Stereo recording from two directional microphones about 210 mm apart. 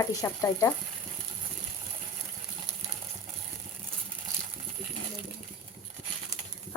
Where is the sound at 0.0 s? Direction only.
15° left (ahead or behind).